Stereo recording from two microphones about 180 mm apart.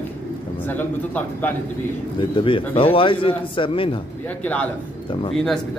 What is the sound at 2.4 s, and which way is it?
Speech, 30° left (ahead or behind).